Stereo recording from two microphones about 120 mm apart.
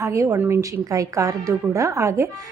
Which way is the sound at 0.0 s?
25° right (ahead or behind).